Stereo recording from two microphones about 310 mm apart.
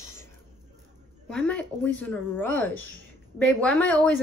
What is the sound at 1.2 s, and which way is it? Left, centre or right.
Speech, centre.